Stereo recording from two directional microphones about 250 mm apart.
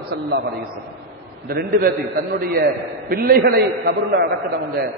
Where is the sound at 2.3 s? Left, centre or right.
Right.